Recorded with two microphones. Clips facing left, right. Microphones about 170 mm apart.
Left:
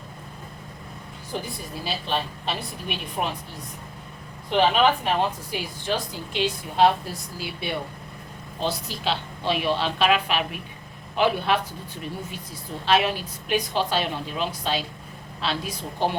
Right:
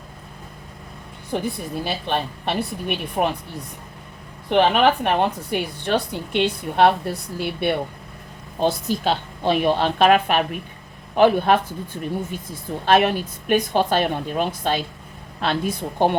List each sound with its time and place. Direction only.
1.3 s a woman's voice: 60° right (ahead or behind)
4.4 s a woman's voice: 60° right (ahead or behind)
8.5 s a woman's voice: 50° right (ahead or behind)
12.8 s a woman's voice: 50° right (ahead or behind)